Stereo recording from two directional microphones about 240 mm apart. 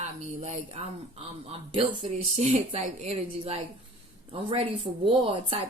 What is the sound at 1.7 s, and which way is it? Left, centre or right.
A woman's voice, right.